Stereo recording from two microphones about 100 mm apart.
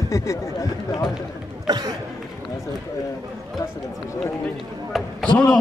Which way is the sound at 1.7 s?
45° right (ahead or behind).